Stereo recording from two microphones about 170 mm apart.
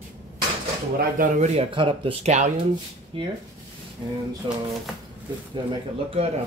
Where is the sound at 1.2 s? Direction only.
45° right (ahead or behind).